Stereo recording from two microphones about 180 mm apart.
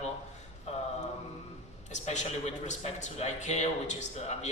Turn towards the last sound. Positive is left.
turn(degrees=40)  # may be behind; listen again after turning